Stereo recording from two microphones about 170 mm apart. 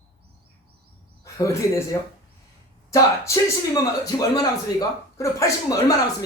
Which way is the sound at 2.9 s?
20° left (ahead or behind).